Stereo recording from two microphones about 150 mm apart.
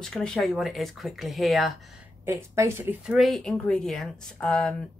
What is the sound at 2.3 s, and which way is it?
Speech, 15° right (ahead or behind).